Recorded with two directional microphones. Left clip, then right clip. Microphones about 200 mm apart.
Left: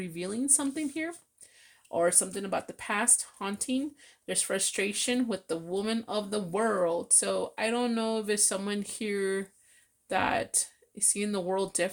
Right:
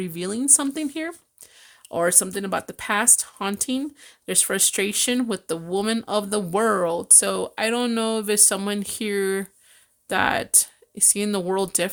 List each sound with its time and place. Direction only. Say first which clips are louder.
0.0 s speech: right 7 dB; 40° right (ahead or behind)